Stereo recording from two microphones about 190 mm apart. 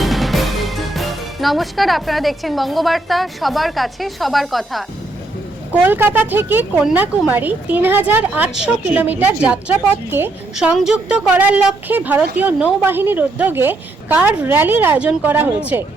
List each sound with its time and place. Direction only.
0.0 s speech: centre (ahead or behind)
5.7 s speech: 10° right (ahead or behind)